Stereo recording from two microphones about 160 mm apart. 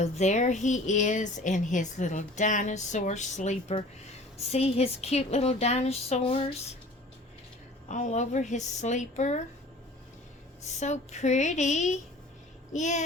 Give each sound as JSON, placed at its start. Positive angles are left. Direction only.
{"t": 0.0, "sound": "a woman's voice", "side_deg": 45}
{"t": 7.9, "sound": "a woman's voice", "side_deg": 50}
{"t": 10.6, "sound": "a woman's voice", "side_deg": 45}